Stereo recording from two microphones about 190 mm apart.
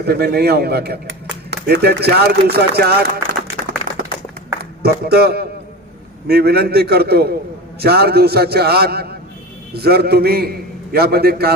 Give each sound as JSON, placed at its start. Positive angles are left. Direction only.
{"t": 0.0, "sound": "speech", "side_deg": -55}
{"t": 3.9, "sound": "a sound", "side_deg": -45}
{"t": 4.8, "sound": "speech", "side_deg": -55}